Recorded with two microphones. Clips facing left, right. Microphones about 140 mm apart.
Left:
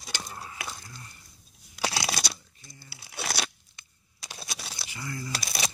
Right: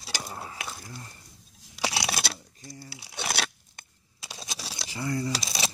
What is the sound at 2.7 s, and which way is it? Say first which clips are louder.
Crumpling: right 9 dB; 30° right (ahead or behind).